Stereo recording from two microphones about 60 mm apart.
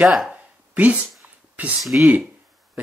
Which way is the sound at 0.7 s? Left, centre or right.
Right.